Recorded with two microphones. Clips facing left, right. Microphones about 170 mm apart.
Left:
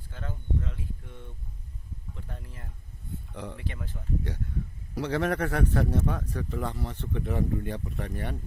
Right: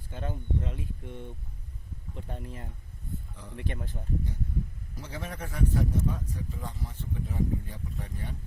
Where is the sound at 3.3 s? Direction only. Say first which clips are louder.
Left 10 dB; 65° left (ahead or behind).